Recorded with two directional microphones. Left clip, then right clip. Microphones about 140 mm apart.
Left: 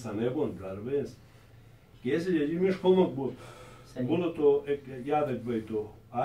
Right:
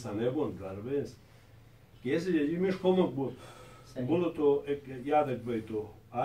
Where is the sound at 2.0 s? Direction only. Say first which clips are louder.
Left 1 dB; centre (ahead or behind).